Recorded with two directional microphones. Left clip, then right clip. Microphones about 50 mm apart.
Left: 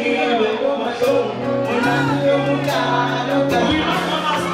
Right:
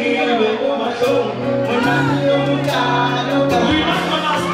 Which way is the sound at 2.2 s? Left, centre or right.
Centre.